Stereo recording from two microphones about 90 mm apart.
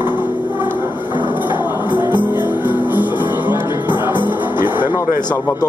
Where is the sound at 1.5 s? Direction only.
60° left (ahead or behind).